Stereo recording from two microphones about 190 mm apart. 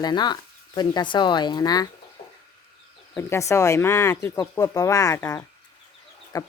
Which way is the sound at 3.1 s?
15° left (ahead or behind).